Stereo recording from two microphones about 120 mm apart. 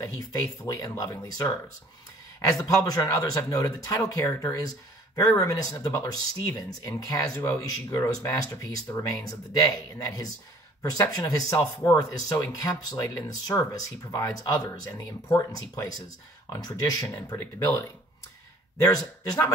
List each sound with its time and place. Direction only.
0.3 s speech: 25° left (ahead or behind)
2.5 s speech: 30° left (ahead or behind)
18.9 s speech: 30° left (ahead or behind)